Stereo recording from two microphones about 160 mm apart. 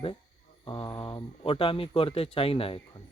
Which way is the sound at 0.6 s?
30° left (ahead or behind).